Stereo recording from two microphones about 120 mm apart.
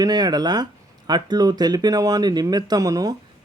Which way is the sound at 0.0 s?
35° right (ahead or behind).